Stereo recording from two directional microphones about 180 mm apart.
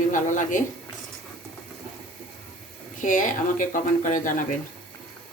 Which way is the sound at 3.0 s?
45° left (ahead or behind).